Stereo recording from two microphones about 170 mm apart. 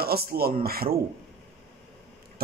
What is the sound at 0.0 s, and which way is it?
Speech, 65° right (ahead or behind).